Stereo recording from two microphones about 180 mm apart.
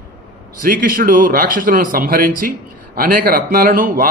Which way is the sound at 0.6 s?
50° right (ahead or behind).